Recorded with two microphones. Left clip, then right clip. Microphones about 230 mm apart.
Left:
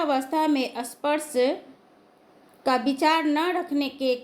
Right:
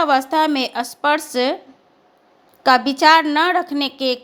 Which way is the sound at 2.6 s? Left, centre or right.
Right.